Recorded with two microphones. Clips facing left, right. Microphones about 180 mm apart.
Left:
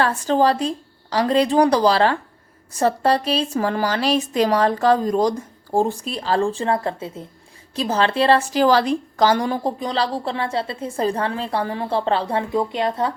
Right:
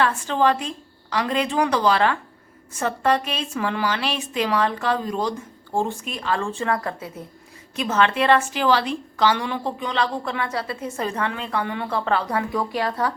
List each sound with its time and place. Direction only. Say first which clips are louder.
0.0 s a woman's voice: left 3 dB; 35° left (ahead or behind)